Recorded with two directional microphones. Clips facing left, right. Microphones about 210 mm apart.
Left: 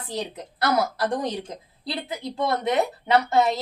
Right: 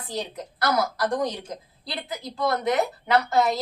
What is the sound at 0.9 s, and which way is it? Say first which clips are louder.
A woman's voice: even; 25° left (ahead or behind).